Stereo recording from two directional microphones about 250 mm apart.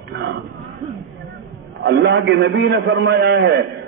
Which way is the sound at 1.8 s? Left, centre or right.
Right.